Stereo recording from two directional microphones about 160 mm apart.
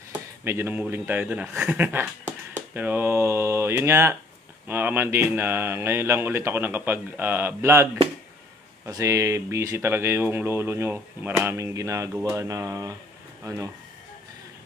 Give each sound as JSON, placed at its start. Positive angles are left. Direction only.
{"t": 0.1, "sound": "speech", "side_deg": -15}